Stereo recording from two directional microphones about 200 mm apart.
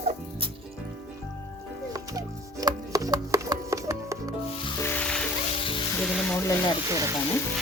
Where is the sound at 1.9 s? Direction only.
20° right (ahead or behind).